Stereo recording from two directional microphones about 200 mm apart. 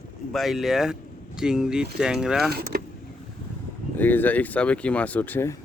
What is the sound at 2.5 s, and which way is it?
Vehicle, 50° right (ahead or behind).